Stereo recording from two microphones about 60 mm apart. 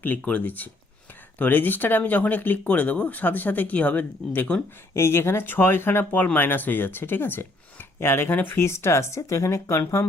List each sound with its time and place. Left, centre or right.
0.0 s speech: left
4.9 s speech: left